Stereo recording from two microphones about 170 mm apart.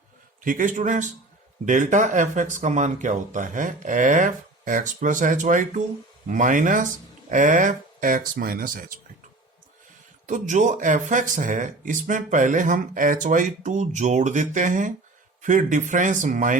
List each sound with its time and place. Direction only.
0.4 s speech: 50° right (ahead or behind)
10.2 s speech: 45° right (ahead or behind)